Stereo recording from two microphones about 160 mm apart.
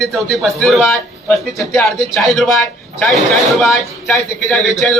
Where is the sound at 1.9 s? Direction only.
Centre (ahead or behind).